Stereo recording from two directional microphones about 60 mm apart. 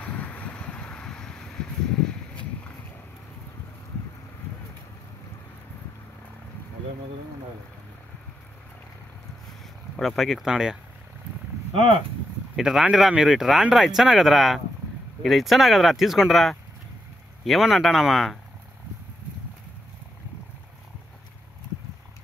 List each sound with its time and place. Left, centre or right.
0.0 s a sound: left
9.9 s speech: centre
12.5 s speech: centre